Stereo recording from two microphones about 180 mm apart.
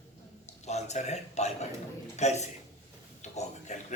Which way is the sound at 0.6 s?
40° left (ahead or behind).